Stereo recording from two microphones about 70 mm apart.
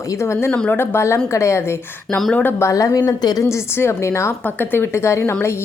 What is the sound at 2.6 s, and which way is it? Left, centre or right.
Speech, left.